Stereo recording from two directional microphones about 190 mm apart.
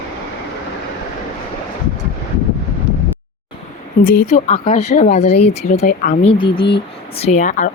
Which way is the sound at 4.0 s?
45° left (ahead or behind).